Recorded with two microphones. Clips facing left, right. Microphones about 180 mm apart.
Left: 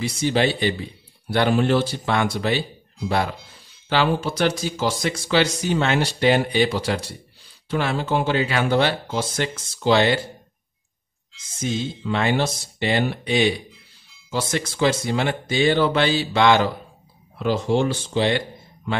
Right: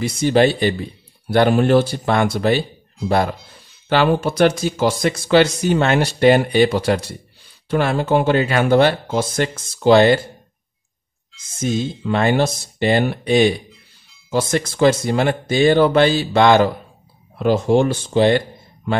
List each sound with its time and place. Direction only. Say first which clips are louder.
0.0 s speech: right 6 dB; 50° right (ahead or behind)
12.0 s speech: right 4 dB; 45° right (ahead or behind)